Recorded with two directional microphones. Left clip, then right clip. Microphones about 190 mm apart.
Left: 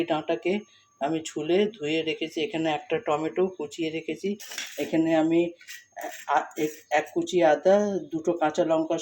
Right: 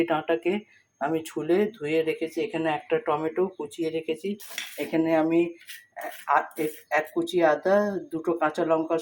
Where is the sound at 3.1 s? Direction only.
35° right (ahead or behind).